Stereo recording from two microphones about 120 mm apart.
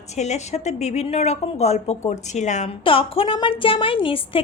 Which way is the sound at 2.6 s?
50° left (ahead or behind).